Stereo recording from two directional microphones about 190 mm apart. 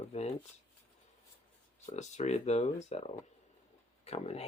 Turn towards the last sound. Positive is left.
turn(degrees=35)  # may be behind; listen again after turning